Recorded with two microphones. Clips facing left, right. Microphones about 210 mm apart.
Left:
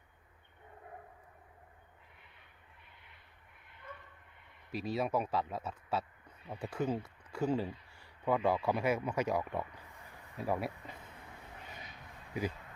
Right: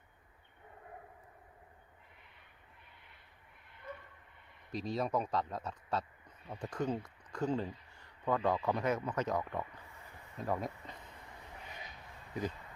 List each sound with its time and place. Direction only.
4.7 s speech: 5° left (ahead or behind)
12.4 s speech: 10° left (ahead or behind)